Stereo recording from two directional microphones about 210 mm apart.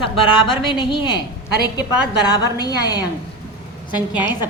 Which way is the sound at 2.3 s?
20° left (ahead or behind).